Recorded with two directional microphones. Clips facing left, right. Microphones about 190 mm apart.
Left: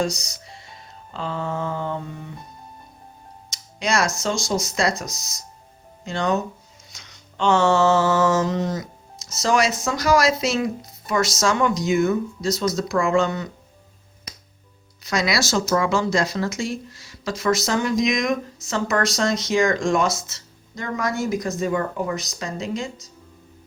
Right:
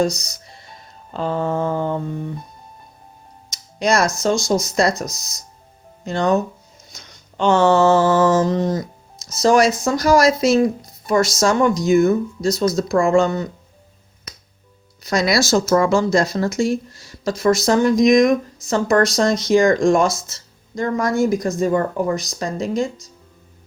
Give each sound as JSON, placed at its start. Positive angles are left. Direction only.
{"t": 1.1, "sound": "speech", "side_deg": -50}
{"t": 3.8, "sound": "speech", "side_deg": -45}
{"t": 6.9, "sound": "mantra", "side_deg": -45}
{"t": 8.5, "sound": "speech", "side_deg": -35}
{"t": 15.0, "sound": "speech", "side_deg": -40}